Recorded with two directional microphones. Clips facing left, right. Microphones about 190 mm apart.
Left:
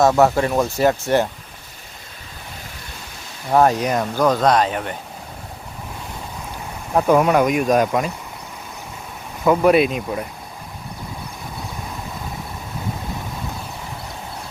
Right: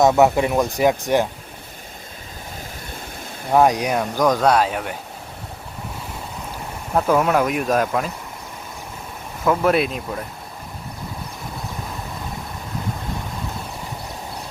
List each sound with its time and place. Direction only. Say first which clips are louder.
0.2 s speech: even; 15° right (ahead or behind)
3.5 s speech: even; 10° right (ahead or behind)
6.9 s speech: left 2 dB; 5° left (ahead or behind)
9.4 s speech: left 4 dB; centre (ahead or behind)